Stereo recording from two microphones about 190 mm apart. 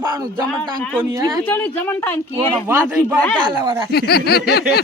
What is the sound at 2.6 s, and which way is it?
Speech, 10° right (ahead or behind).